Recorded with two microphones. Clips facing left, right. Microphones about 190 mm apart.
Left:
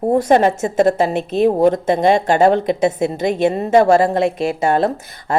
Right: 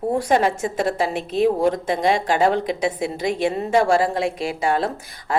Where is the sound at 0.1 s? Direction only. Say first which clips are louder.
Left 6 dB; 25° left (ahead or behind).